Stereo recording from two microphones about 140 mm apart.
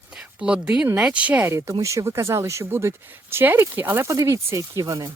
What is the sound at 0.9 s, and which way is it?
Speech, 10° right (ahead or behind).